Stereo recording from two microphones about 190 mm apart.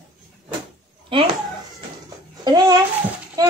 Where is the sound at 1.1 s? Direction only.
25° right (ahead or behind).